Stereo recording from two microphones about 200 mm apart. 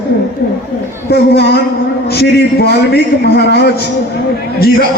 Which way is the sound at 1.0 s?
55° left (ahead or behind).